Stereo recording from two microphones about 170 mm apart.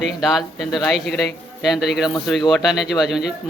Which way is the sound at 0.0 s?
Centre (ahead or behind).